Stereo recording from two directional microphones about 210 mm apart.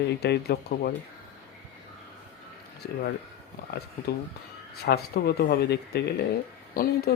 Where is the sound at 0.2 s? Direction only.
50° left (ahead or behind).